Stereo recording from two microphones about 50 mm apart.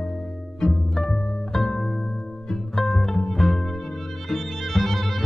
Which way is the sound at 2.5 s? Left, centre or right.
Centre.